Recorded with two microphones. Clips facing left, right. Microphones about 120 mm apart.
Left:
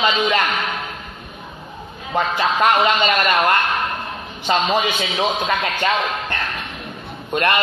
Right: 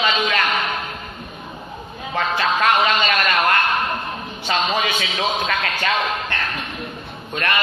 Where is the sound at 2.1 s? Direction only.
15° left (ahead or behind).